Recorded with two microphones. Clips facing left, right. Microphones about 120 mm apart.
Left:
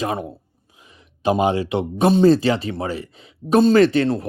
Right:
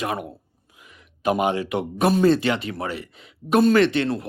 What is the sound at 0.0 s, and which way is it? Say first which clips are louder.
A man's voice: left 3 dB; 30° left (ahead or behind).